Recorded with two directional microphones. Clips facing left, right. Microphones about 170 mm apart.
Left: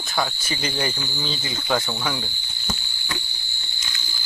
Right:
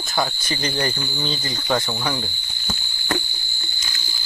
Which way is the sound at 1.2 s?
Centre (ahead or behind).